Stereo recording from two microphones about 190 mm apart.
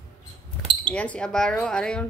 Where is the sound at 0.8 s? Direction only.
5° left (ahead or behind).